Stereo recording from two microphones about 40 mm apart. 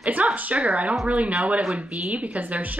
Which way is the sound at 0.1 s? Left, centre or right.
Right.